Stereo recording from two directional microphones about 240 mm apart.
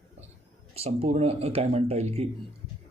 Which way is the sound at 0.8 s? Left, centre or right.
Right.